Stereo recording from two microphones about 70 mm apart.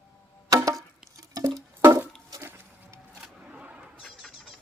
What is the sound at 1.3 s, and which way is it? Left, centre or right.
Music, right.